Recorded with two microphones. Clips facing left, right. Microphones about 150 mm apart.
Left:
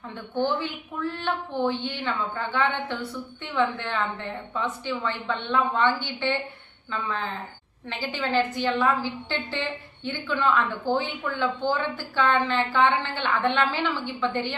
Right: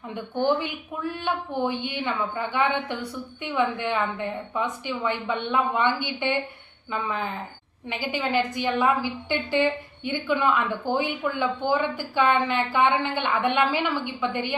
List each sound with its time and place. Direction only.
0.1 s a woman's voice: 15° right (ahead or behind)